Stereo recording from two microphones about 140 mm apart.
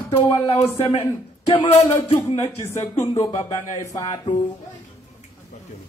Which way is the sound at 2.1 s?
25° left (ahead or behind).